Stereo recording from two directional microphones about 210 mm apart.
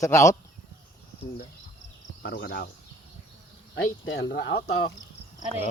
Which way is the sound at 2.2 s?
55° left (ahead or behind).